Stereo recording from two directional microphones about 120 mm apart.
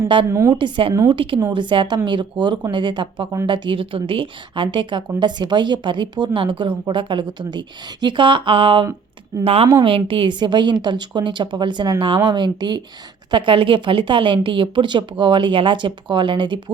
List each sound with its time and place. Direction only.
0.3 s a woman's voice: 25° right (ahead or behind)
0.5 s a woman's voice: 45° right (ahead or behind)
9.4 s a woman's voice: 55° right (ahead or behind)
9.8 s a woman's voice: 45° right (ahead or behind)